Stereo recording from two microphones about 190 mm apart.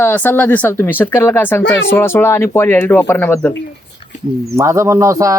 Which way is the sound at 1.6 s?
75° left (ahead or behind).